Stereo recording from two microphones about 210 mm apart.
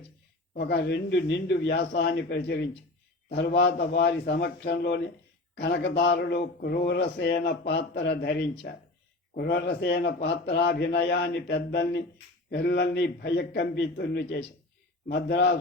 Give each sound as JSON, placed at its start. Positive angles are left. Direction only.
{"t": 0.5, "sound": "speech", "side_deg": 55}